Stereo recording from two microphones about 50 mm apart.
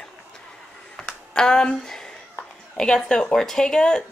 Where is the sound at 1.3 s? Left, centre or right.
Centre.